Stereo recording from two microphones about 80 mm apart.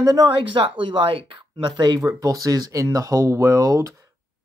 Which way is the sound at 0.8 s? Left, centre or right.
Right.